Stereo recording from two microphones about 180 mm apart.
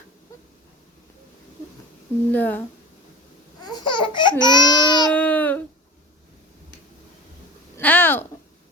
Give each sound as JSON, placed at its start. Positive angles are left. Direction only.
{"t": 2.3, "sound": "speech", "side_deg": 10}
{"t": 3.6, "sound": "baby cry", "side_deg": 20}
{"t": 5.1, "sound": "baby cry", "side_deg": 10}
{"t": 7.8, "sound": "a sound", "side_deg": 10}